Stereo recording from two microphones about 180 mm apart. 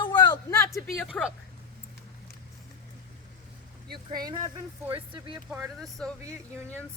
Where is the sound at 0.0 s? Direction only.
25° left (ahead or behind).